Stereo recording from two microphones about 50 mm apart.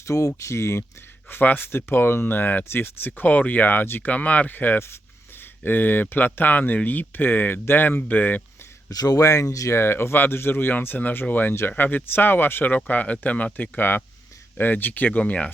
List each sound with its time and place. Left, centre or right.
0.0 s speech: left
1.3 s speech: left
2.6 s speech: left
3.1 s speech: left
4.1 s speech: left
9.2 s speech: left
9.8 s speech: left
10.8 s speech: left
15.2 s speech: left